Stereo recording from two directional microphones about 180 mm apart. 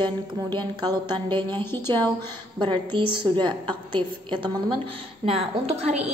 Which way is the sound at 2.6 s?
25° right (ahead or behind).